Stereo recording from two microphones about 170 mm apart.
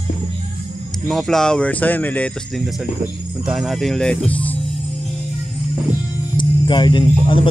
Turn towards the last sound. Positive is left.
turn(degrees=30)  # may be behind; listen again after turning